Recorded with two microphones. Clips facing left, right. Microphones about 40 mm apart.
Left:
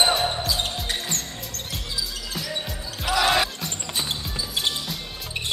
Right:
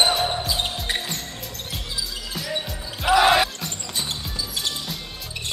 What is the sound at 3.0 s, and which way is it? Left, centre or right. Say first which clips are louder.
Basketball bounce: right 4 dB; centre.